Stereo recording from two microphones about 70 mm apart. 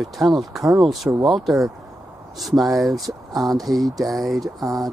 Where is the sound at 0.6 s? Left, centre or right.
Right.